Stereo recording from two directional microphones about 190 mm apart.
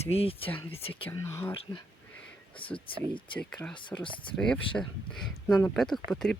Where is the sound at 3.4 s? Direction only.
5° left (ahead or behind).